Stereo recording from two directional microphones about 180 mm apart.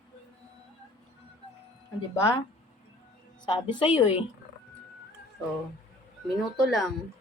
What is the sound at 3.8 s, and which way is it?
Speech, 30° left (ahead or behind).